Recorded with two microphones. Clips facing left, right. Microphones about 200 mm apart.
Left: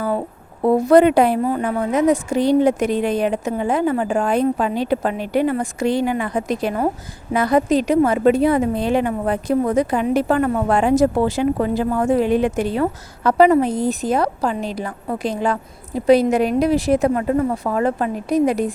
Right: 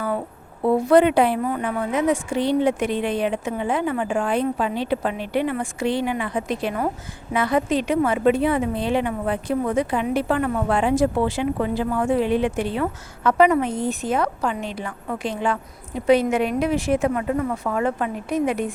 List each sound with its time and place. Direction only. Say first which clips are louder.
0.6 s a woman's voice: left 3 dB; 40° left (ahead or behind)